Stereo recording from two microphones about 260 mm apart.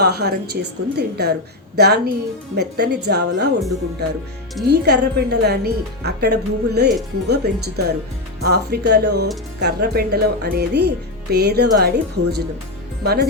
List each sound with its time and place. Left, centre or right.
0.0 s a woman's voice: right
4.7 s a woman's voice: right